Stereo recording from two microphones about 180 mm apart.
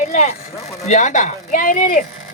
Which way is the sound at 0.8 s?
40° left (ahead or behind).